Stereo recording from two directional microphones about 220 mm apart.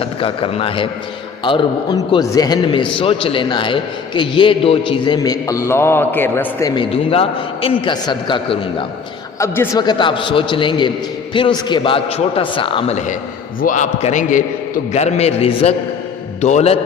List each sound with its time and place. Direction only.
0.0 s a man's voice: 25° left (ahead or behind)